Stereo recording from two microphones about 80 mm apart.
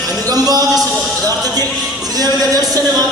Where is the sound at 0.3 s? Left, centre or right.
Right.